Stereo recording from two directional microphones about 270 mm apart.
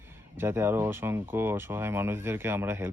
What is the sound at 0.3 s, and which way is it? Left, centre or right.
Speech, centre.